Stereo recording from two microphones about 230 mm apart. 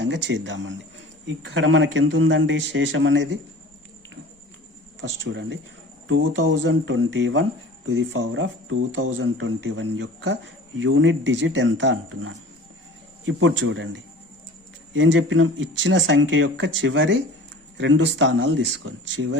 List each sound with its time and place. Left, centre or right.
0.0 s speech: right
4.9 s speech: right